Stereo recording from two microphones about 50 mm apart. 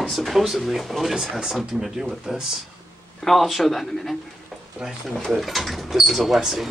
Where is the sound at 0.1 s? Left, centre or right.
Centre.